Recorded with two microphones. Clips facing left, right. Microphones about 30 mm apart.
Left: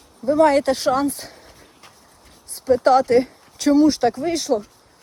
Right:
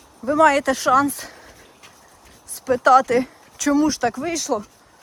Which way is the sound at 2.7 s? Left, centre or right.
Right.